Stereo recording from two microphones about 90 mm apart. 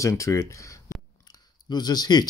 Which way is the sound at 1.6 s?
50° left (ahead or behind).